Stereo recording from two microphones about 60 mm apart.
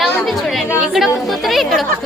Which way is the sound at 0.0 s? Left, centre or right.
Centre.